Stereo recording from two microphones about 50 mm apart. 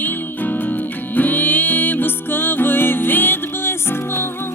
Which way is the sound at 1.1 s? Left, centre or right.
Left.